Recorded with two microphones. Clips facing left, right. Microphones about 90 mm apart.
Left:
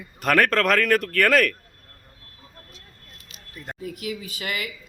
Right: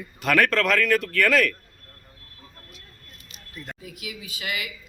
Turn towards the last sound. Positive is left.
turn(degrees=50)  # may be behind; listen again after turning